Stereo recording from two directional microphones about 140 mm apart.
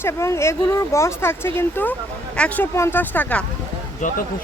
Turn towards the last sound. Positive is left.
turn(degrees=70)  # may be behind; listen again after turning